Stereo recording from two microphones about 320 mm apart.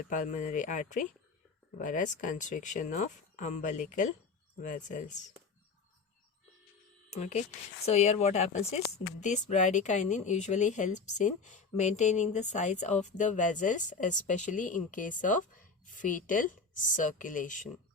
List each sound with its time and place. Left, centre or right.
0.1 s speech: left
7.1 s speech: left